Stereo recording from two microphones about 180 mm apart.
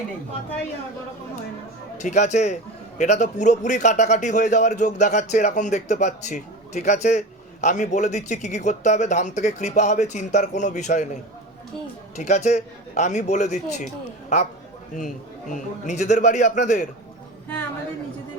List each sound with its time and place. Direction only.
2.0 s a man's voice: 40° left (ahead or behind)
15.5 s a man's voice: 40° left (ahead or behind)